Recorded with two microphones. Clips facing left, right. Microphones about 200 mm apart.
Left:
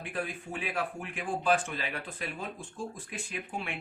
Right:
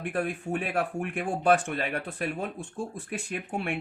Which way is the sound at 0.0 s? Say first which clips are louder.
Right 6 dB; 65° right (ahead or behind).